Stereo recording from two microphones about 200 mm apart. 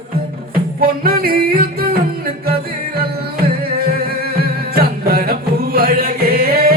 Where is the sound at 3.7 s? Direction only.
50° right (ahead or behind).